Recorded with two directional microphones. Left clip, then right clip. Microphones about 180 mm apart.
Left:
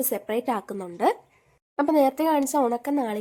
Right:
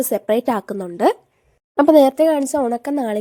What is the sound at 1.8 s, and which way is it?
Speech, 45° right (ahead or behind).